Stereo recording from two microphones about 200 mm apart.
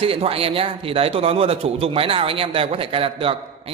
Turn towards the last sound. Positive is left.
turn(degrees=-25)  # may be behind; listen again after turning